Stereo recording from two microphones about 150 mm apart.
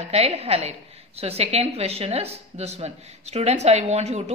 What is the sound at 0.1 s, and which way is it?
A woman's voice, 45° right (ahead or behind).